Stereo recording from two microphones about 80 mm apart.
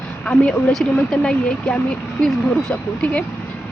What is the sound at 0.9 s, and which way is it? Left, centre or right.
Speech, centre.